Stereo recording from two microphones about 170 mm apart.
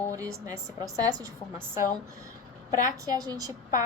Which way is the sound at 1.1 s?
20° right (ahead or behind).